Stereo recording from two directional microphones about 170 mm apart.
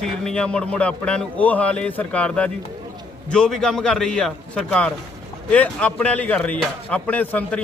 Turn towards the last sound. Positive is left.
turn(degrees=10)  # may be behind; listen again after turning